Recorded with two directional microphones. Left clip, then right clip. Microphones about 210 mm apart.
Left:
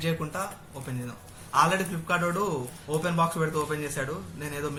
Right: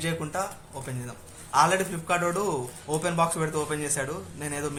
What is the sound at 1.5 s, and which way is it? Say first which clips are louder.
A man's voice: right 1 dB; 40° right (ahead or behind).